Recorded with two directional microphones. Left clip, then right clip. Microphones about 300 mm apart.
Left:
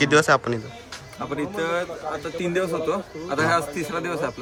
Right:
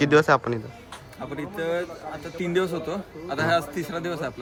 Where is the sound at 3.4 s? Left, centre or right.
Centre.